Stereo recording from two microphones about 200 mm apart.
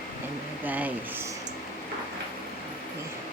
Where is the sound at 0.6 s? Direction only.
10° right (ahead or behind).